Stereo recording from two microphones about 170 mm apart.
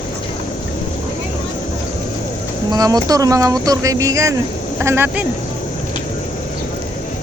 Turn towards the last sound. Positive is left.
turn(degrees=-10)  # may be behind; listen again after turning